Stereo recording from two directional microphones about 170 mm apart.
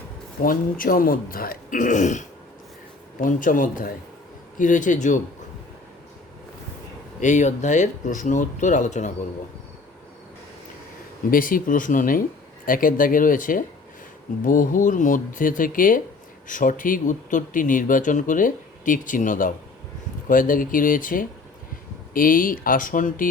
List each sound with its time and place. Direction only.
0.4 s speech: 55° left (ahead or behind)
7.2 s speech: 45° left (ahead or behind)
11.3 s speech: 55° left (ahead or behind)